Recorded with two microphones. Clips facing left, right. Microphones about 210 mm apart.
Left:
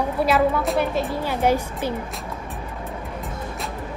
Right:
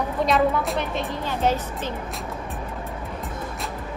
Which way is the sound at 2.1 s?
Centre (ahead or behind).